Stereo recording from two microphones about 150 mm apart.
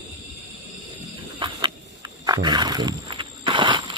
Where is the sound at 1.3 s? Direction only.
30° right (ahead or behind).